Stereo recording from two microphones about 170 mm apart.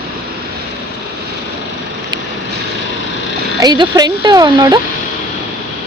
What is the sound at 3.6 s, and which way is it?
Speech, 25° right (ahead or behind).